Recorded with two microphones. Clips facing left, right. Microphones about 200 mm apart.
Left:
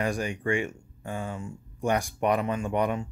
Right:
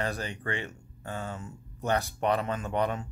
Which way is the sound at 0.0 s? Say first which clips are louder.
Left 5 dB; 15° left (ahead or behind).